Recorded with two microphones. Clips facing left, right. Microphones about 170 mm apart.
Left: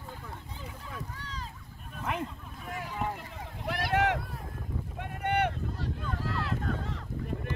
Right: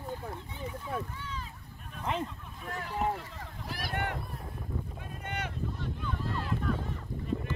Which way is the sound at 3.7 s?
80° left.